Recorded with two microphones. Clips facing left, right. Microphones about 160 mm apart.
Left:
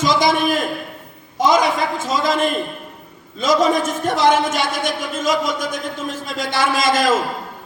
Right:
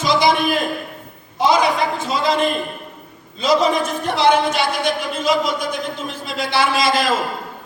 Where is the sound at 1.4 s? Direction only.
45° left (ahead or behind).